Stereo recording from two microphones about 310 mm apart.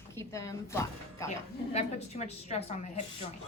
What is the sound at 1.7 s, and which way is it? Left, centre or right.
A woman's voice, left.